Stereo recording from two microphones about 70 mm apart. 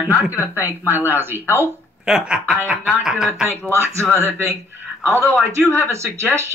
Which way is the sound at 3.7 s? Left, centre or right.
Right.